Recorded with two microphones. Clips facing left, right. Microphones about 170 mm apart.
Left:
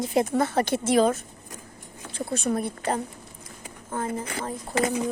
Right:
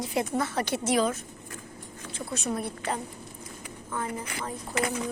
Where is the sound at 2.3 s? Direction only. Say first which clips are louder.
Left 5 dB; 55° left (ahead or behind).